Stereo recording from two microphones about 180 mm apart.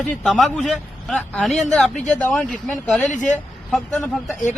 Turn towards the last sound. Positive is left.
turn(degrees=0)  # may be behind; listen again after turning